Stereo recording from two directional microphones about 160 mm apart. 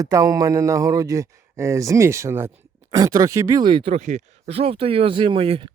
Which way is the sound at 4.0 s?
50° right (ahead or behind).